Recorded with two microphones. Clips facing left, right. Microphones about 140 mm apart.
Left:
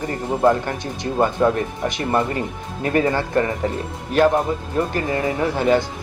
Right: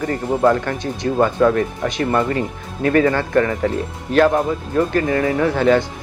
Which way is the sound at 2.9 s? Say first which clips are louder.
Right 3 dB; 20° left (ahead or behind).